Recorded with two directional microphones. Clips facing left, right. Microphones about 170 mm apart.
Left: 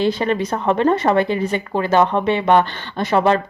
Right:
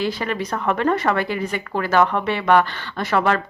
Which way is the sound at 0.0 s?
25° left (ahead or behind).